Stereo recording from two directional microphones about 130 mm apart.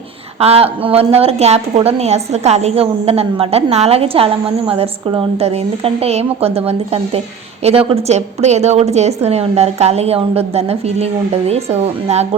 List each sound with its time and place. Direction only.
0.3 s a woman's voice: 50° right (ahead or behind)